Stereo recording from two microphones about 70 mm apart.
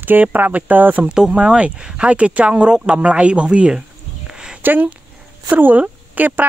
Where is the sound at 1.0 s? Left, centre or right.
Centre.